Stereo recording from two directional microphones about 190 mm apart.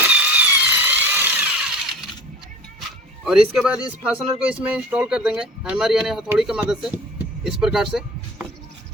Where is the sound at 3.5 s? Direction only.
5° right (ahead or behind).